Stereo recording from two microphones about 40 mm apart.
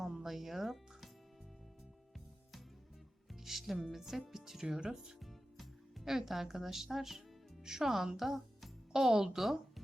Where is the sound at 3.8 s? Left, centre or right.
Centre.